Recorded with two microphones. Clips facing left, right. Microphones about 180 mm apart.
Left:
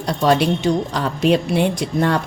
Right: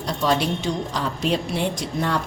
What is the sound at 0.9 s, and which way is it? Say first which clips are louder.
A woman's voice: left 6 dB; 65° left (ahead or behind).